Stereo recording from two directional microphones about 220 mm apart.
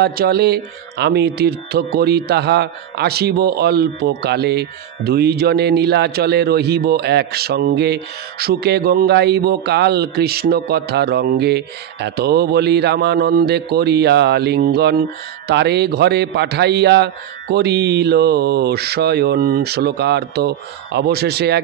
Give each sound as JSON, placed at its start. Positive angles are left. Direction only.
{"t": 0.0, "sound": "speech", "side_deg": -45}